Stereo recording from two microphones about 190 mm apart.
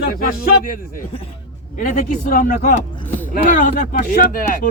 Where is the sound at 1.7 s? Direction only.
45° left (ahead or behind).